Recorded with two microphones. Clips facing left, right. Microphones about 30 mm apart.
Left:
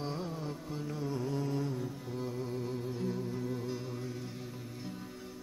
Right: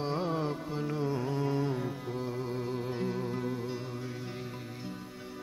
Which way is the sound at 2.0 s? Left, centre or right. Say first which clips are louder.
Right 3 dB; right.